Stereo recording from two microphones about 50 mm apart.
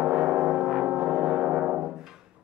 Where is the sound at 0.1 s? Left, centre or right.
Centre.